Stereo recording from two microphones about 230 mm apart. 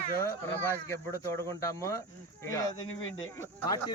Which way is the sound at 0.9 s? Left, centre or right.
Centre.